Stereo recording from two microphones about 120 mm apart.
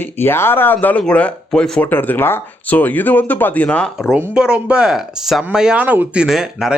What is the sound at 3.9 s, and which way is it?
Speech, 5° right (ahead or behind).